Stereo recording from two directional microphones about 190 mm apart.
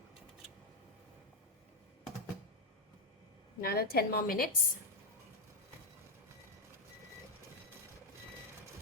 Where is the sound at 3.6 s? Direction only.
55° left (ahead or behind).